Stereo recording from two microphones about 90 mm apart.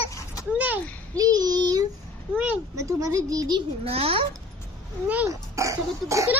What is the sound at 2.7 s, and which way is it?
Speech, 35° right (ahead or behind).